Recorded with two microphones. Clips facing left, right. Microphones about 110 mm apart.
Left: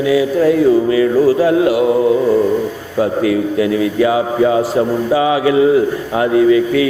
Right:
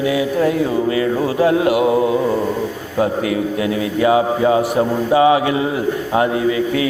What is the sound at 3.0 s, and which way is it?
A man's voice, 25° right (ahead or behind).